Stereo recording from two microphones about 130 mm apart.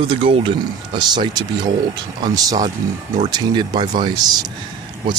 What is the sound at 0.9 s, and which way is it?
Speech, 35° right (ahead or behind).